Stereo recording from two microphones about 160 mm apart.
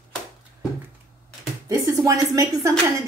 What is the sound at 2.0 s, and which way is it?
Speech, 20° right (ahead or behind).